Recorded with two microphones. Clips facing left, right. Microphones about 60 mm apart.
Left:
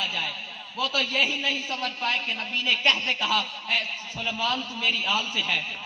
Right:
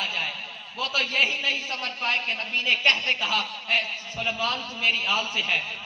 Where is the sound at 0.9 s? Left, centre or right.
Right.